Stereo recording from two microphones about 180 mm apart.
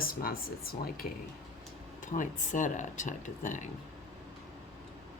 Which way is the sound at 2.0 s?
45° left (ahead or behind).